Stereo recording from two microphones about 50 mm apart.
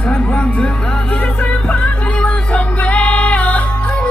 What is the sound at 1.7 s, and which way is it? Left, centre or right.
Music, left.